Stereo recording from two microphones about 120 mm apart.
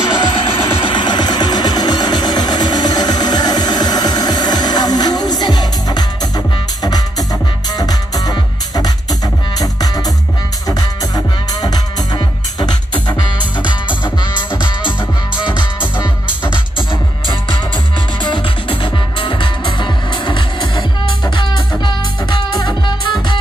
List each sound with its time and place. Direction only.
0.4 s a sound: 50° left (ahead or behind); by 7.2 s 35° left (ahead or behind)
7.7 s music: 35° left (ahead or behind)
18.2 s music: 40° left (ahead or behind)